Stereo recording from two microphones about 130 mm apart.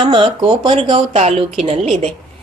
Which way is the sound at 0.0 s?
40° right (ahead or behind).